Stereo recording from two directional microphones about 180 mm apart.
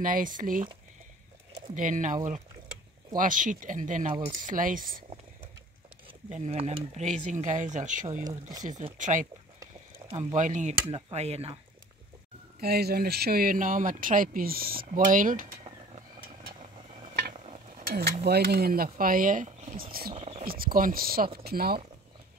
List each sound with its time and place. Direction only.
0.0 s speech: 50° right (ahead or behind)
1.8 s speech: 45° right (ahead or behind)
3.2 s speech: 45° right (ahead or behind)
6.2 s speech: 40° right (ahead or behind)
9.6 s a sound: 20° right (ahead or behind)
10.1 s speech: 40° right (ahead or behind)
10.7 s speech: 30° right (ahead or behind)
12.5 s speech: 60° right (ahead or behind)
17.3 s stir: 40° right (ahead or behind)
17.8 s speech: 60° right (ahead or behind)
20.2 s a sound: 35° right (ahead or behind)
20.4 s speech: 55° right (ahead or behind)